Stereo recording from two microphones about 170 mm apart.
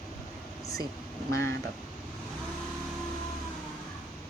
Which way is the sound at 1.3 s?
15° left (ahead or behind).